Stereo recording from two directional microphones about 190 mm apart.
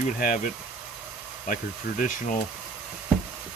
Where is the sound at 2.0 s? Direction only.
45° left (ahead or behind).